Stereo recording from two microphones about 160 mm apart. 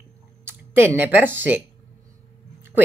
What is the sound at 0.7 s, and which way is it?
Speech, 15° right (ahead or behind).